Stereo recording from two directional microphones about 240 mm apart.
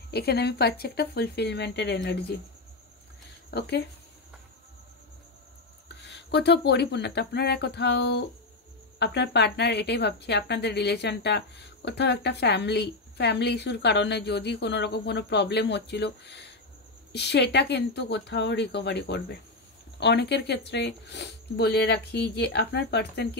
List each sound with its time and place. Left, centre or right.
0.1 s a woman's voice: left
3.4 s speech: left
5.9 s a woman's voice: left